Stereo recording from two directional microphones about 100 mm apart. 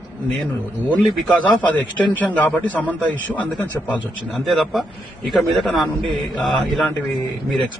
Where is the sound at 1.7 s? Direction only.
15° left (ahead or behind).